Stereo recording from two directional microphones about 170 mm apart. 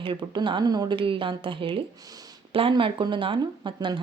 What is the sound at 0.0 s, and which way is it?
Speech, 25° right (ahead or behind).